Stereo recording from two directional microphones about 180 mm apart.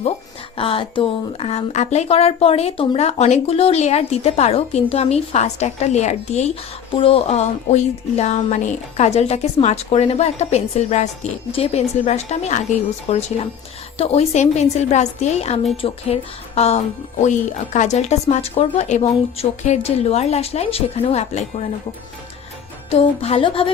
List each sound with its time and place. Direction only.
0.5 s speech: 30° left (ahead or behind)
22.9 s speech: 35° left (ahead or behind)